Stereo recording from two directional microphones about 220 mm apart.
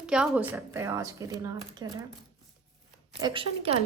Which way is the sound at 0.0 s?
5° right (ahead or behind).